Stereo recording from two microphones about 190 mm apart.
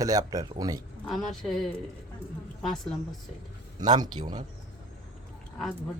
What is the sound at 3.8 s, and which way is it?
Speech, 20° right (ahead or behind).